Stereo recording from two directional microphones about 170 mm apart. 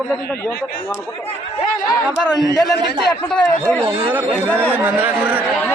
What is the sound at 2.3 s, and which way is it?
Speech, 25° left (ahead or behind).